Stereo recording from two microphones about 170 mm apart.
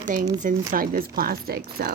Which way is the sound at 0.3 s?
50° right (ahead or behind).